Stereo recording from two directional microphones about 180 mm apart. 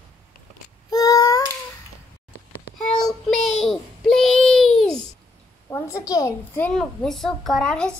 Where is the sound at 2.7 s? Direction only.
Centre (ahead or behind).